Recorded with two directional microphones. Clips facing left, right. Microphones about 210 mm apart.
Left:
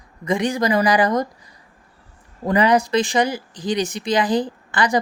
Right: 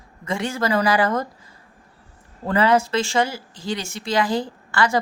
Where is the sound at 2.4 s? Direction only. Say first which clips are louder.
Left 2 dB; 15° left (ahead or behind).